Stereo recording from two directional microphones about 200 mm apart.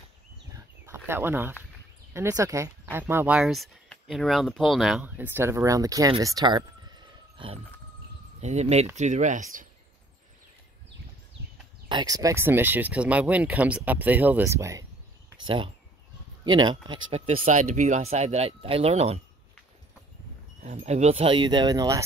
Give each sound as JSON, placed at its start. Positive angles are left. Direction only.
{"t": 0.8, "sound": "speech", "side_deg": -10}
{"t": 6.2, "sound": "a sound", "side_deg": -20}
{"t": 8.4, "sound": "speech", "side_deg": -35}
{"t": 11.9, "sound": "speech", "side_deg": -20}
{"t": 15.4, "sound": "speech", "side_deg": -25}
{"t": 20.6, "sound": "speech", "side_deg": -35}